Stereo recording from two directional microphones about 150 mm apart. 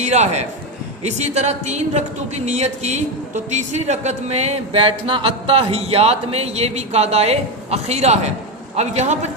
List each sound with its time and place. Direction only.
0.0 s speech: 50° right (ahead or behind)